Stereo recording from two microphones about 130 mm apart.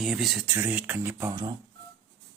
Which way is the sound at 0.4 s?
15° right (ahead or behind).